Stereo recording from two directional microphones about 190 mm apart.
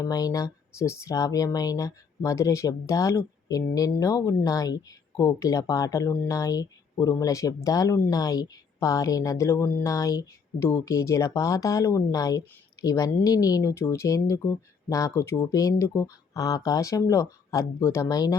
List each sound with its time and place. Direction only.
0.0 s speech: 20° left (ahead or behind)